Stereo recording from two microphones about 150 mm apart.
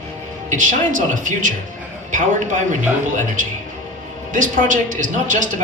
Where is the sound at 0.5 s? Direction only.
60° right (ahead or behind).